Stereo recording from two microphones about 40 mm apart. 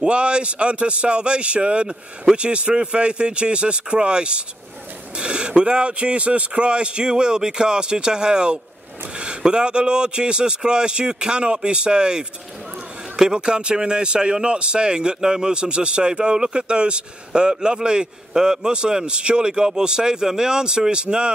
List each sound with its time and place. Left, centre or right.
0.0 s a man's voice: right
5.1 s a sound: right
5.5 s a man's voice: right